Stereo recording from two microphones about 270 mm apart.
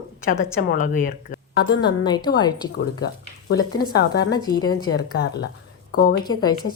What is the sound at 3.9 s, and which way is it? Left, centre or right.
Speech, left.